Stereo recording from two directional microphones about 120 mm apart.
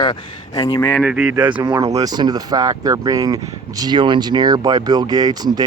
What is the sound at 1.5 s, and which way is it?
Speech, 40° right (ahead or behind).